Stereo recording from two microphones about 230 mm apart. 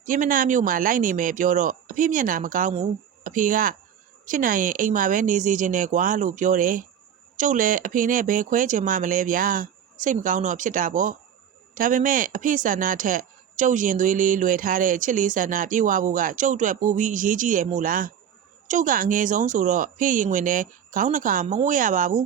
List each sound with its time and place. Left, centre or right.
0.0 s speech: right